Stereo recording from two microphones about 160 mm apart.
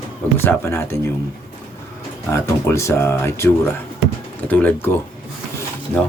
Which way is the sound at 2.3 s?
20° left (ahead or behind).